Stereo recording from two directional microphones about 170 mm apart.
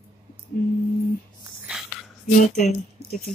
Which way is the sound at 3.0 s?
40° right (ahead or behind).